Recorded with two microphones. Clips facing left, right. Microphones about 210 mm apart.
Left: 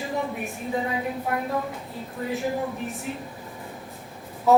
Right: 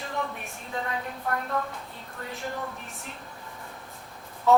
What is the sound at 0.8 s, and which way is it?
Speech, 10° left (ahead or behind).